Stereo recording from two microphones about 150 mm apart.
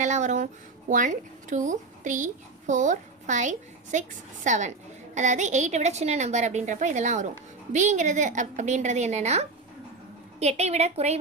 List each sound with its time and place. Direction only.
0.0 s a woman's voice: 55° right (ahead or behind)